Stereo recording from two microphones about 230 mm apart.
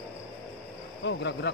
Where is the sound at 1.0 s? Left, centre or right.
Left.